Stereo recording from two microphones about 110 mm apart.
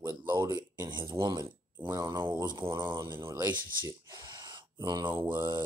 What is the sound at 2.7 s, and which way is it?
Speech, 40° right (ahead or behind).